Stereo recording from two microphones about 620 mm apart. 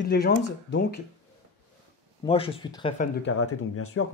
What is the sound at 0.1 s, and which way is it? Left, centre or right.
Speech, centre.